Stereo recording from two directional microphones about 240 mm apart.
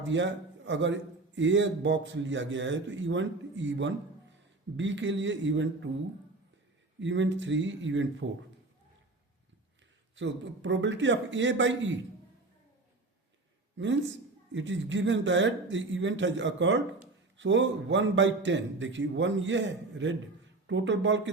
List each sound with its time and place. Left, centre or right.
0.0 s a man's voice: right
7.0 s a man's voice: right
10.2 s a man's voice: right
13.7 s a man's voice: right